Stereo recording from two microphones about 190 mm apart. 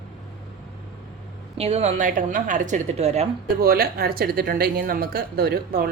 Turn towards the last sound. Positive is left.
turn(degrees=-55)  # may be behind; listen again after turning